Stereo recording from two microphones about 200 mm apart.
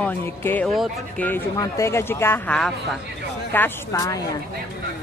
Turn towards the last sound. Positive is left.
turn(degrees=15)  # may be behind; listen again after turning